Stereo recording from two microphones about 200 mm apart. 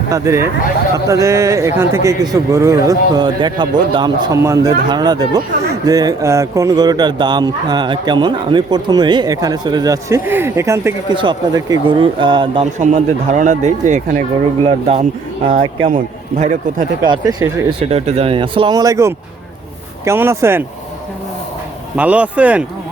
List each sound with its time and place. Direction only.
0.1 s speech: 15° right (ahead or behind)
11.1 s speech: 25° right (ahead or behind)
12.8 s speech: 40° right (ahead or behind)
16.4 s speech: 35° right (ahead or behind)
17.0 s speech: 20° right (ahead or behind)
21.9 s speech: 5° right (ahead or behind)